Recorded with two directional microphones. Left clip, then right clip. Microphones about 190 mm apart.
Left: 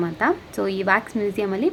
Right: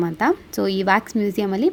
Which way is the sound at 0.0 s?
45° right (ahead or behind).